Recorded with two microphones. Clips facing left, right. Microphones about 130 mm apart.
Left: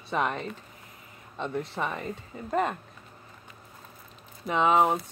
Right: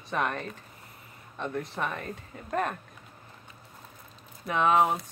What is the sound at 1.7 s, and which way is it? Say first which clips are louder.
Speech: left 1 dB; 15° left (ahead or behind).